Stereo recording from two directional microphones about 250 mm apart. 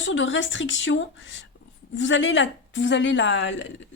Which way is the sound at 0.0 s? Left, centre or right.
Left.